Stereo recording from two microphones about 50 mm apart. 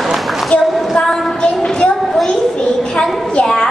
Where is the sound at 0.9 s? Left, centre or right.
Centre.